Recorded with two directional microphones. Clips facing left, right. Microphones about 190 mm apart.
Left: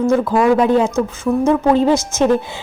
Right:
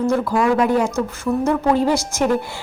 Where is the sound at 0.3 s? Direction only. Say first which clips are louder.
Left 4 dB; 25° left (ahead or behind).